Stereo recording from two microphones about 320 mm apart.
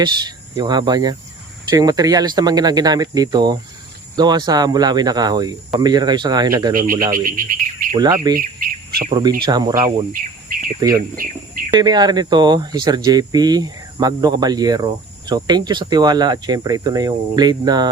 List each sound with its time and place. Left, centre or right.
0.0 s speech: centre
6.7 s speech: right
7.1 s insect: right
7.9 s speech: centre
8.4 s bird: right
9.4 s speech: centre
10.1 s a sound: right
10.8 s speech: centre